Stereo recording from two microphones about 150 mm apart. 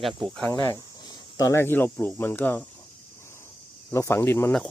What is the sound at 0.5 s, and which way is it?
Speech, 20° left (ahead or behind).